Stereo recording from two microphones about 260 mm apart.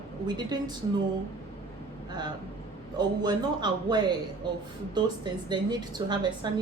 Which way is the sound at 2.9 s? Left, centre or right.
Centre.